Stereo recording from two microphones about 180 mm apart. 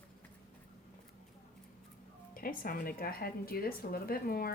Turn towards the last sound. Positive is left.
turn(degrees=55)  # may be behind; listen again after turning